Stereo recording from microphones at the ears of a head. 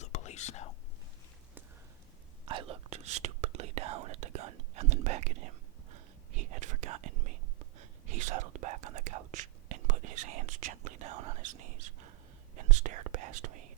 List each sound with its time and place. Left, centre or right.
0.0 s whispering: left
2.5 s whispering: right